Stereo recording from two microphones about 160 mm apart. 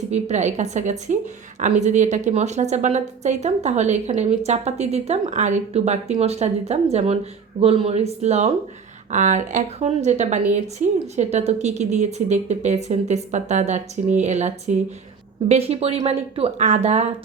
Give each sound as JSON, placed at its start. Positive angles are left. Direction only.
{"t": 0.1, "sound": "a woman's voice", "side_deg": -45}